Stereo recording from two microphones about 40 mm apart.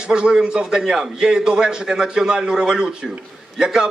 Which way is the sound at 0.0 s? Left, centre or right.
Right.